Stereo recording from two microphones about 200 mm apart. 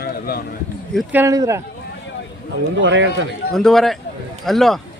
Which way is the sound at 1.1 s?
15° right (ahead or behind).